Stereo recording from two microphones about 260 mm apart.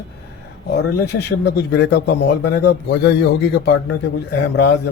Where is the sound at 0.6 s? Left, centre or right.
Left.